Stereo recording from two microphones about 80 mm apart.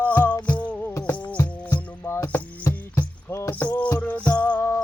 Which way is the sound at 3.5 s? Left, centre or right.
Centre.